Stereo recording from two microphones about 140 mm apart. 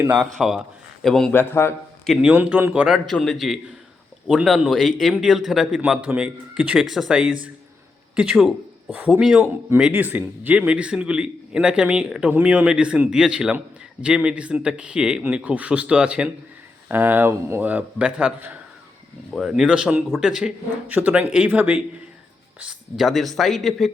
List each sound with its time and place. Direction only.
0.2 s a man's voice: centre (ahead or behind)
1.3 s a man's voice: 15° left (ahead or behind)
2.2 s a man's voice: 10° right (ahead or behind)
22.6 s a man's voice: centre (ahead or behind)